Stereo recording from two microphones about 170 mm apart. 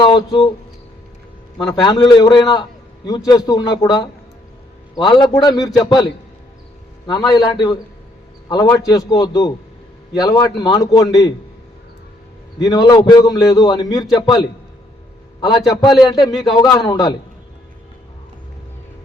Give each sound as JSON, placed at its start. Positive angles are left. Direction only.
{"t": 0.0, "sound": "speech", "side_deg": 25}
{"t": 1.7, "sound": "a man's voice", "side_deg": 25}
{"t": 12.5, "sound": "a man's voice", "side_deg": 25}
{"t": 16.2, "sound": "speech", "side_deg": 0}
{"t": 16.5, "sound": "a man's voice", "side_deg": 25}